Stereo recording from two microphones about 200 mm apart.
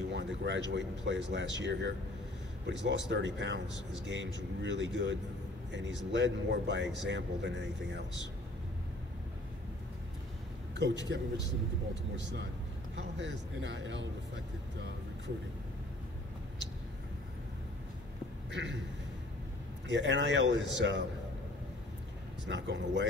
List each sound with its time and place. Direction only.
0.1 s speech: 60° right (ahead or behind)
6.1 s speech: 60° right (ahead or behind)
10.8 s speech: 60° right (ahead or behind)
18.5 s speech: 65° right (ahead or behind)
19.9 s speech: 60° right (ahead or behind)
22.5 s speech: 60° right (ahead or behind)